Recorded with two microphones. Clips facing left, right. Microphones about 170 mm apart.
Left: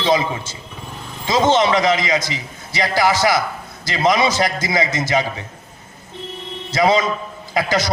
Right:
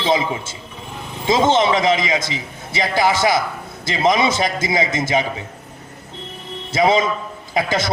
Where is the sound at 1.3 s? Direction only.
25° right (ahead or behind).